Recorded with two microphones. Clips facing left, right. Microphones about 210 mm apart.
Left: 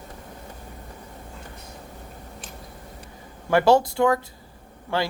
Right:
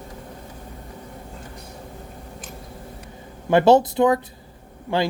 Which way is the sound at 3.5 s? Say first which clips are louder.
Right 3 dB; 20° right (ahead or behind).